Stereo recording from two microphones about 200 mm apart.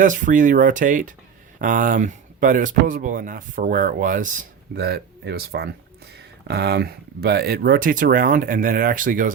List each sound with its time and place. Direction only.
0.0 s speech: 40° right (ahead or behind)